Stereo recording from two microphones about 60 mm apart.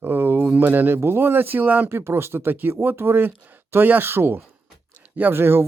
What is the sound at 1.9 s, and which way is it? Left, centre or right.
Speech, right.